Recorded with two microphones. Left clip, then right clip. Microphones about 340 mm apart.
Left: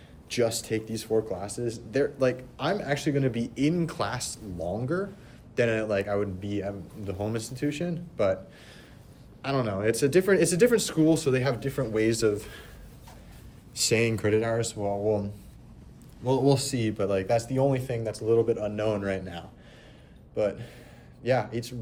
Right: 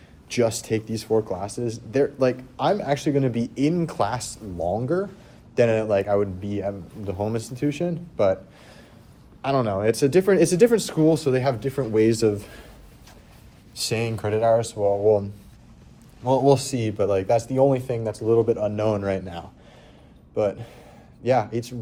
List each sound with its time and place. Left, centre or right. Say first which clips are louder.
0.3 s speech: right 4 dB; centre
9.4 s speech: right 6 dB; centre
14.3 s speech: right 6 dB; centre